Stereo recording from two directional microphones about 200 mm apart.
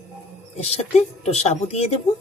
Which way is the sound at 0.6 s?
30° left (ahead or behind).